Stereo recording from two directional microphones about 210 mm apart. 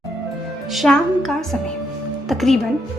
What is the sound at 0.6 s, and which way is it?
A woman's voice, centre (ahead or behind).